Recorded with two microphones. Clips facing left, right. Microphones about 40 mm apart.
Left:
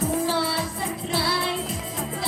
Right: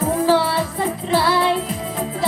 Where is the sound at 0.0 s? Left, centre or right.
Right.